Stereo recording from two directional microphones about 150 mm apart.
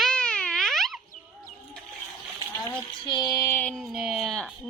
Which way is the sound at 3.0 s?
30° left (ahead or behind).